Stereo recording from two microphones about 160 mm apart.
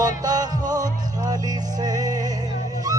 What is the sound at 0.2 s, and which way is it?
Music, 25° right (ahead or behind).